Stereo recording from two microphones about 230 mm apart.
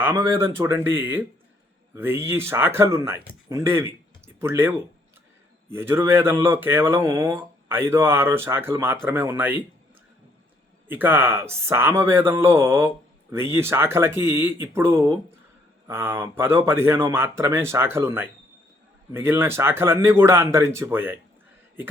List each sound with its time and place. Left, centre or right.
0.0 s speech: centre
10.8 s speech: centre